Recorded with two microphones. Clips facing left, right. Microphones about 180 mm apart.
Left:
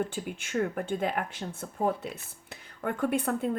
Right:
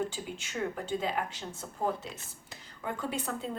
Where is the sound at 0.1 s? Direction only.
55° left (ahead or behind).